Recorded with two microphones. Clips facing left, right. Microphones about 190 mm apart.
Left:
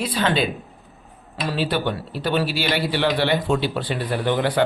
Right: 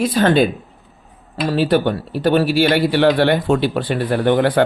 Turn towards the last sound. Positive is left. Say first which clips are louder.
# right 6 dB
turn(degrees=-55)  # may be behind; listen again after turning